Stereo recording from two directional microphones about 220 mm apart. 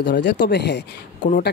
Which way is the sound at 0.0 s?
50° left (ahead or behind).